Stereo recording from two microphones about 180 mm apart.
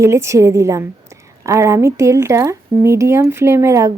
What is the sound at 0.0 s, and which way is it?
Speech, 15° right (ahead or behind).